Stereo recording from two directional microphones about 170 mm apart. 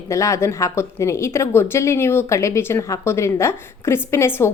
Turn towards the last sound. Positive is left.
turn(degrees=15)  # may be behind; listen again after turning